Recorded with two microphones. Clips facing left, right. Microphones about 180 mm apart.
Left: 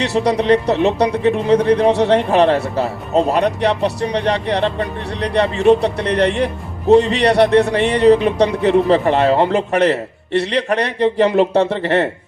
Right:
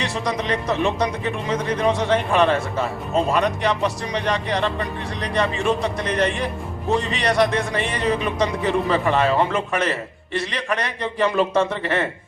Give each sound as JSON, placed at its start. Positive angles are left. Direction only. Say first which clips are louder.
{"t": 0.0, "sound": "speech", "louder": "left 8 dB", "side_deg": 70}